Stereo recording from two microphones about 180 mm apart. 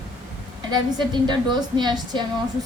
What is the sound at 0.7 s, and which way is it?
A woman's voice, 25° right (ahead or behind).